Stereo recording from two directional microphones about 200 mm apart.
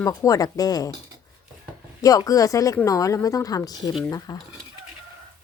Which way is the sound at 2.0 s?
15° left (ahead or behind).